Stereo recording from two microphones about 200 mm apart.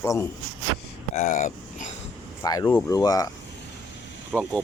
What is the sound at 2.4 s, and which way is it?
Speech, 15° left (ahead or behind).